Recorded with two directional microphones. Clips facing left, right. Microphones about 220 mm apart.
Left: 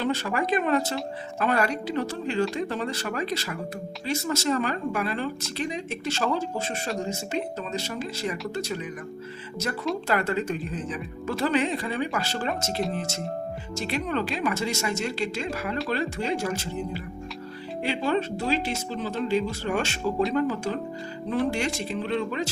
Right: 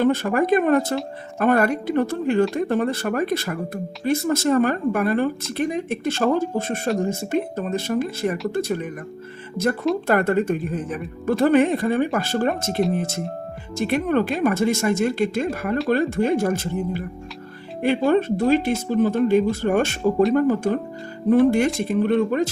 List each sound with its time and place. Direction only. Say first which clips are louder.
0.0 s a woman's voice: right 8 dB; 50° right (ahead or behind)
10.1 s a woman's voice: right 7 dB; 55° right (ahead or behind)